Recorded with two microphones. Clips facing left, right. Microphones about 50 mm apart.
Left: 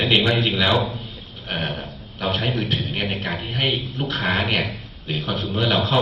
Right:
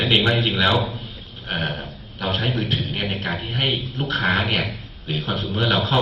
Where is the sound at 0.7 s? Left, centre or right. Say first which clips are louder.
Left 1 dB; centre.